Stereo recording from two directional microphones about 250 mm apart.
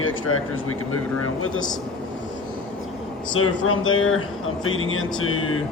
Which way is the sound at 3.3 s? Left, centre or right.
Left.